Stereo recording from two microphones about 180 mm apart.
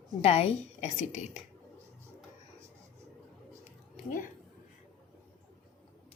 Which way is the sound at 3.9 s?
45° left (ahead or behind).